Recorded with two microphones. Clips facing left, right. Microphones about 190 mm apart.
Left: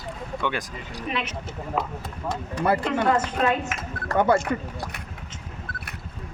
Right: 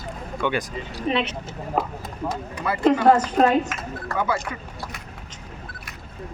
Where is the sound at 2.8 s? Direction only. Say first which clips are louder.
Right 6 dB; 40° right (ahead or behind).